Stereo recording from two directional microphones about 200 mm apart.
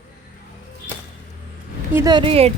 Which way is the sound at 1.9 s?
20° right (ahead or behind).